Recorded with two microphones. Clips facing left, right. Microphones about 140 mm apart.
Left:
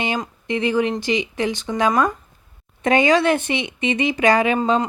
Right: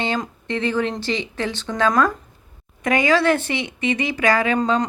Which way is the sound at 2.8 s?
25° left (ahead or behind).